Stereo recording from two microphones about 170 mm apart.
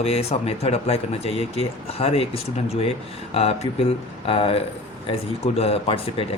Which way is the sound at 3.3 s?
35° left (ahead or behind).